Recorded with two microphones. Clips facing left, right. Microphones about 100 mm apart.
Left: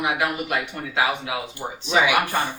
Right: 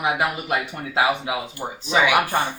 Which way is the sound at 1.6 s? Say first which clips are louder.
Right 1 dB; 20° right (ahead or behind).